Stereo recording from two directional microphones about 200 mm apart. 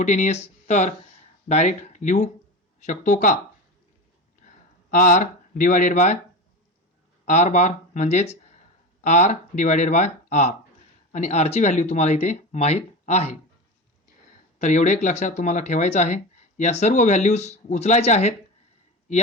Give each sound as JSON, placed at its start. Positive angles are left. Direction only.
{"t": 0.0, "sound": "speech", "side_deg": 40}
{"t": 4.4, "sound": "a sound", "side_deg": 40}
{"t": 4.9, "sound": "speech", "side_deg": 40}
{"t": 7.3, "sound": "speech", "side_deg": 35}
{"t": 14.6, "sound": "speech", "side_deg": 40}